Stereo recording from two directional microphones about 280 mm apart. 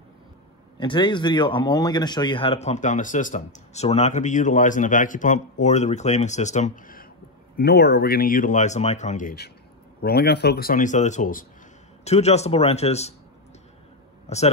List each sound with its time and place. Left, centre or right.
0.7 s speech: centre